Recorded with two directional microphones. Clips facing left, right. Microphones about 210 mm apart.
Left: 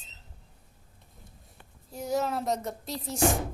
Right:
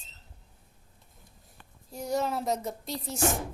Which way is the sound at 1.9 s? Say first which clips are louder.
Left 1 dB; centre (ahead or behind).